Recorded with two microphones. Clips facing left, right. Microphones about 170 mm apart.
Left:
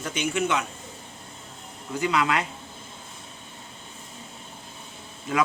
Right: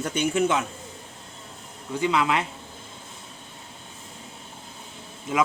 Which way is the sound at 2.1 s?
20° right (ahead or behind).